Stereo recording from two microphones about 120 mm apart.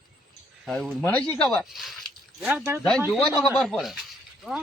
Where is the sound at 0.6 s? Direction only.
5° left (ahead or behind).